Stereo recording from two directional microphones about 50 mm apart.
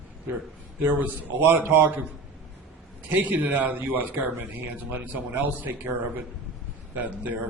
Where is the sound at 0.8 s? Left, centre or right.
Right.